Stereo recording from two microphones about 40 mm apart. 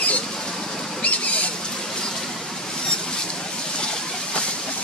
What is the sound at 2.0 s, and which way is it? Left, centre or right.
Vehicle, centre.